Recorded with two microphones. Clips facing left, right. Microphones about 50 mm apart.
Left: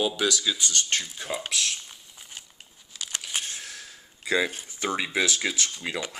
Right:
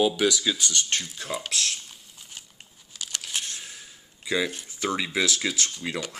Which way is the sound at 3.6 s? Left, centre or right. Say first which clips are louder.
Left 2 dB; left.